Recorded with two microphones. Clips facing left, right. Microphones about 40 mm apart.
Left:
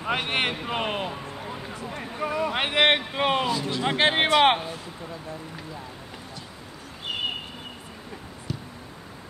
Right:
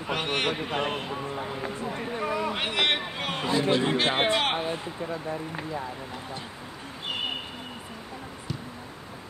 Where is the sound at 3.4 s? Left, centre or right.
Right.